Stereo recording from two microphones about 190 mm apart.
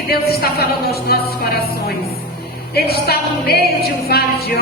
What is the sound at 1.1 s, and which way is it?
Speech, 55° left (ahead or behind).